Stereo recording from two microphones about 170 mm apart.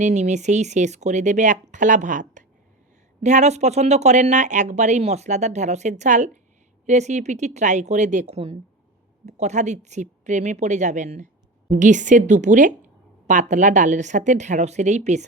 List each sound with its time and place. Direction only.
0.0 s a woman's voice: 45° right (ahead or behind)